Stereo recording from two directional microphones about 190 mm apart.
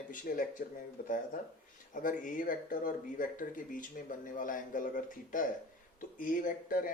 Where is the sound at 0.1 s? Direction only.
45° left (ahead or behind).